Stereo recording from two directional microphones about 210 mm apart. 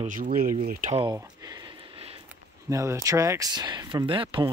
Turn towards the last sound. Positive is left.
turn(degrees=-25)  # may be behind; listen again after turning